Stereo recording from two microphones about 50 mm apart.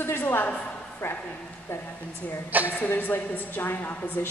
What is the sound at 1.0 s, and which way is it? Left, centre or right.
Speech, left.